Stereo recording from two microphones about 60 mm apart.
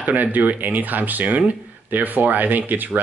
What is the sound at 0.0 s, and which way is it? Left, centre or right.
Speech, right.